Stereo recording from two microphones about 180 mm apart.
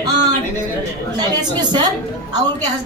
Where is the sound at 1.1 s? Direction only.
25° right (ahead or behind).